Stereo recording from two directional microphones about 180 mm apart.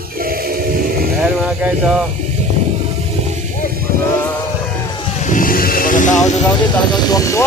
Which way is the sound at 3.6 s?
55° right (ahead or behind).